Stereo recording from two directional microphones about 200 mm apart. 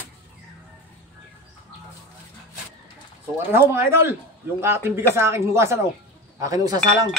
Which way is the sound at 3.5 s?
10° right (ahead or behind).